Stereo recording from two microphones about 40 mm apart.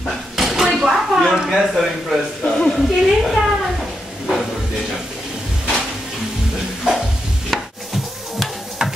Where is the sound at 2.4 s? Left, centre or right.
Centre.